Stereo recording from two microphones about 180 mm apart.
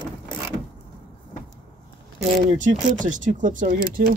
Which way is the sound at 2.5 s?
45° right (ahead or behind).